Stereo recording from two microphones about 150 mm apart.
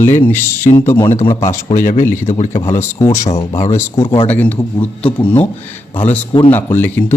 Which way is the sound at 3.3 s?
45° left (ahead or behind).